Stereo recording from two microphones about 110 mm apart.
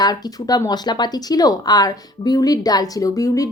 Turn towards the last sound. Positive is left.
turn(degrees=30)  # may be behind; listen again after turning